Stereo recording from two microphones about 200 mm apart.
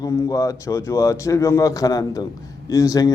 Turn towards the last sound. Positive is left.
turn(degrees=20)  # may be behind; listen again after turning